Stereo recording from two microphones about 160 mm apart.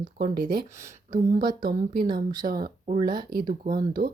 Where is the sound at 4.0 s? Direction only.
60° right (ahead or behind).